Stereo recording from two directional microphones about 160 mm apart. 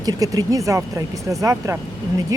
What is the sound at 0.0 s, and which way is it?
Speech, 25° right (ahead or behind).